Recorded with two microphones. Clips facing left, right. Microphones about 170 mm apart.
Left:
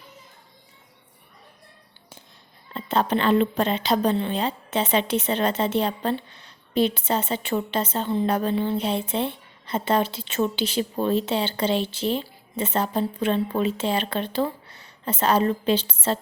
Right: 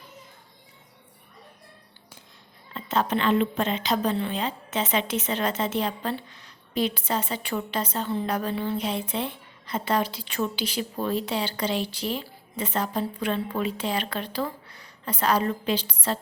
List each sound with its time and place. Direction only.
2.7 s a woman's voice: 30° left (ahead or behind)